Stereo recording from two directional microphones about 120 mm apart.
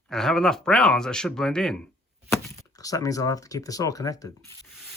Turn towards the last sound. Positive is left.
turn(degrees=30)  # may be behind; listen again after turning